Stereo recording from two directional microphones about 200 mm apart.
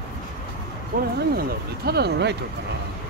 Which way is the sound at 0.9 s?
45° right (ahead or behind).